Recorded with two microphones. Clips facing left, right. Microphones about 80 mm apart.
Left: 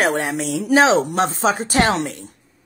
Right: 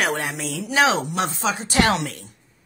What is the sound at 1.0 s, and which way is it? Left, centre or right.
Speech, left.